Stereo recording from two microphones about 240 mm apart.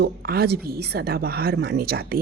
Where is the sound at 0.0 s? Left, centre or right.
Right.